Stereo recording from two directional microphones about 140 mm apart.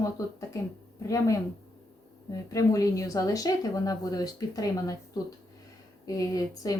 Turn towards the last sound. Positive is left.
turn(degrees=25)  # may be behind; listen again after turning